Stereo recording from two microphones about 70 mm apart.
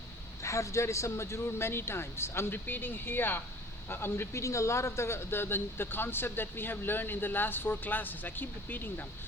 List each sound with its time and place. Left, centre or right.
0.4 s a man's voice: left